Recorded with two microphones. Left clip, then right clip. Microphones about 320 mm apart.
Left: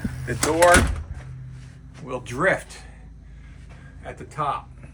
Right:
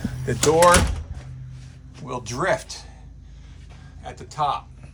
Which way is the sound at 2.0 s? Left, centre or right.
Centre.